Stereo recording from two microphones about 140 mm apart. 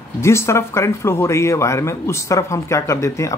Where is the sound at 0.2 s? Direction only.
20° left (ahead or behind).